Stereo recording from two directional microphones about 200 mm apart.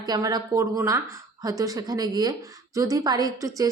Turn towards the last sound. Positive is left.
turn(degrees=-15)  # may be behind; listen again after turning